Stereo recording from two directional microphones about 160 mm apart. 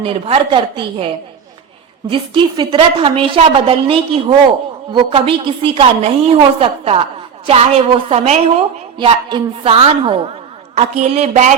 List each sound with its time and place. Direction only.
0.0 s a woman's voice: 35° right (ahead or behind)
2.0 s a woman's voice: 30° right (ahead or behind)